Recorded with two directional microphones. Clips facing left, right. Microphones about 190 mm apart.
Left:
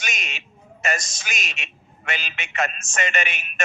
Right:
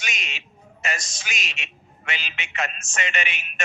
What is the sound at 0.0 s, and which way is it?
A man's voice, 45° left (ahead or behind).